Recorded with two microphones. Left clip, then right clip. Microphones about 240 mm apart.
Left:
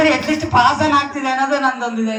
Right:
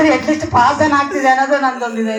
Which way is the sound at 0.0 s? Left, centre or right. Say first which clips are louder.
Right 2 dB; centre.